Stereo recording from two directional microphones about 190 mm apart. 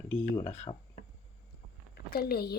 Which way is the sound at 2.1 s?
55° left (ahead or behind).